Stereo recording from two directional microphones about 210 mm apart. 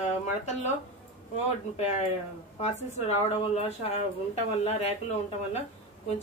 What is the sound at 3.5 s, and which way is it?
Speech, 30° left (ahead or behind).